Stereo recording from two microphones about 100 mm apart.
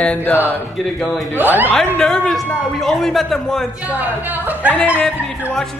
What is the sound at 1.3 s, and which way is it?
Speech, 20° right (ahead or behind).